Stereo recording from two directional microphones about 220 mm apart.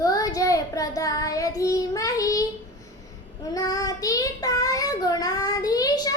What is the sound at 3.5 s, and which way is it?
Child singing, 15° left (ahead or behind).